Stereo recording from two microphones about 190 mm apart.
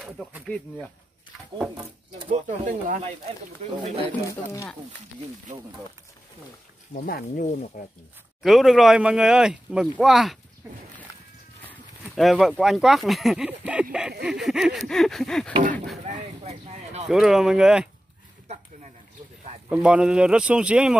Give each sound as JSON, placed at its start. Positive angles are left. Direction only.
{"t": 0.2, "sound": "speech", "side_deg": 0}
{"t": 2.1, "sound": "speech", "side_deg": -30}
{"t": 4.3, "sound": "speech", "side_deg": 15}
{"t": 6.9, "sound": "speech", "side_deg": 45}
{"t": 8.4, "sound": "speech", "side_deg": 0}
{"t": 11.6, "sound": "speech", "side_deg": 5}
{"t": 16.0, "sound": "a sound", "side_deg": -35}
{"t": 17.1, "sound": "speech", "side_deg": 0}
{"t": 19.7, "sound": "speech", "side_deg": -5}